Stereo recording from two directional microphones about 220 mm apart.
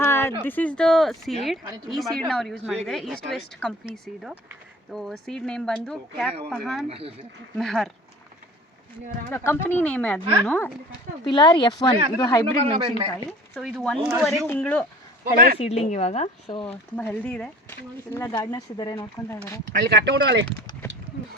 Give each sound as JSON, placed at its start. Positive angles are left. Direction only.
{"t": 0.0, "sound": "a sound", "side_deg": 10}
{"t": 0.4, "sound": "speech", "side_deg": 5}
{"t": 6.8, "sound": "speech", "side_deg": -25}
{"t": 7.6, "sound": "speech", "side_deg": 0}
{"t": 9.3, "sound": "speech", "side_deg": 10}
{"t": 11.3, "sound": "speech", "side_deg": 20}
{"t": 13.5, "sound": "speech", "side_deg": 0}
{"t": 15.2, "sound": "speech", "side_deg": -40}
{"t": 15.5, "sound": "speech", "side_deg": 25}
{"t": 17.0, "sound": "speech", "side_deg": 5}
{"t": 19.8, "sound": "speech", "side_deg": -50}
{"t": 20.8, "sound": "a sound", "side_deg": 10}